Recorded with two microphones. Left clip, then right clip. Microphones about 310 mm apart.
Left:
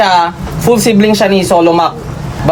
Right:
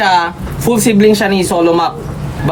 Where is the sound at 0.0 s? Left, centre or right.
Centre.